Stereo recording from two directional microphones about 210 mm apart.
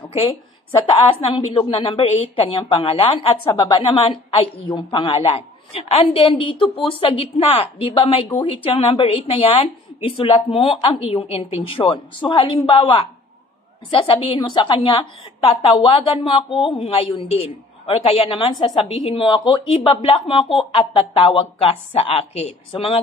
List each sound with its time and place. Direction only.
0.1 s speech: 25° left (ahead or behind)